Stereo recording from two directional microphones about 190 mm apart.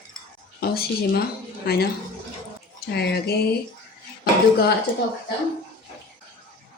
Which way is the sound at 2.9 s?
60° left (ahead or behind).